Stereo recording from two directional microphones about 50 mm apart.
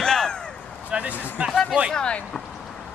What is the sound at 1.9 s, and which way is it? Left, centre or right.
Speech, left.